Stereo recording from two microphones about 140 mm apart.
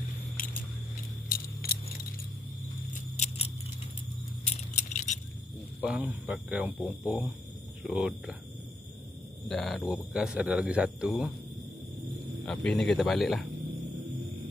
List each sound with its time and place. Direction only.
1.3 s keys jangling: 90° left
2.9 s keys jangling: 55° left (ahead or behind)
4.9 s keys jangling: 60° left (ahead or behind)
5.8 s speech: 5° right (ahead or behind)
9.5 s speech: 5° left (ahead or behind)
12.4 s speech: 5° left (ahead or behind)